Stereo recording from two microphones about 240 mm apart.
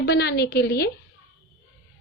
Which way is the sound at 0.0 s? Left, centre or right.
Left.